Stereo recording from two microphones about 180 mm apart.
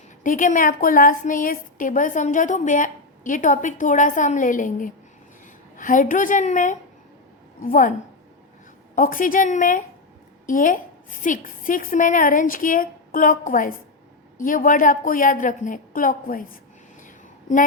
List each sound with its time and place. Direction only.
0.2 s a woman's voice: 45° left (ahead or behind)
9.0 s a woman's voice: 50° left (ahead or behind)